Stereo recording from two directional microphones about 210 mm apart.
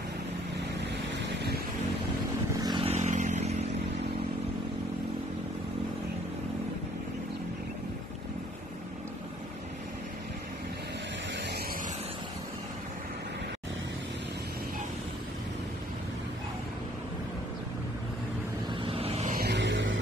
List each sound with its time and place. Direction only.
2.6 s vehicle: 25° right (ahead or behind)
18.7 s vehicle: 25° right (ahead or behind)
19.3 s vehicle: 50° right (ahead or behind)